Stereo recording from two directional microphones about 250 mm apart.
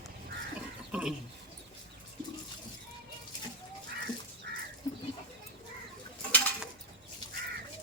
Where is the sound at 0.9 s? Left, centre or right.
Centre.